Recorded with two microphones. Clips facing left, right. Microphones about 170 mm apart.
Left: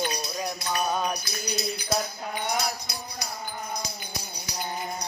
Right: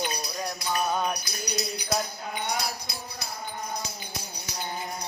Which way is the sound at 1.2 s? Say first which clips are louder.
Left 1 dB; 25° left (ahead or behind).